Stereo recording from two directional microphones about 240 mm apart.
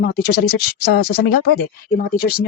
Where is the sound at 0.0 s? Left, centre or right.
Left.